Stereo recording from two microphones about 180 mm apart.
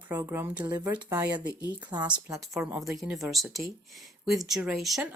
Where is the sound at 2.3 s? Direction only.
5° right (ahead or behind).